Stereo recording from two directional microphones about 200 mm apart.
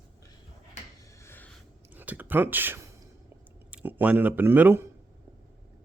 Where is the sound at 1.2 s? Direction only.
10° left (ahead or behind).